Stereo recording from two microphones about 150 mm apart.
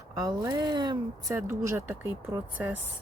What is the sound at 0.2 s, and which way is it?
Speech, 25° right (ahead or behind).